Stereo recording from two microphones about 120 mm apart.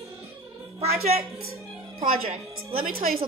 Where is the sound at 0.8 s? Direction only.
60° right (ahead or behind).